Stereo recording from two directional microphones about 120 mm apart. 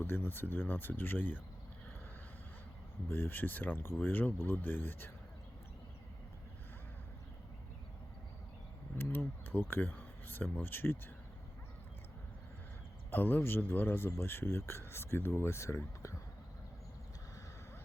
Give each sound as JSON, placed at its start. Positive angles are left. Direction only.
{"t": 0.0, "sound": "speech", "side_deg": 20}
{"t": 3.1, "sound": "speech", "side_deg": 15}
{"t": 9.0, "sound": "speech", "side_deg": 20}
{"t": 13.1, "sound": "speech", "side_deg": 15}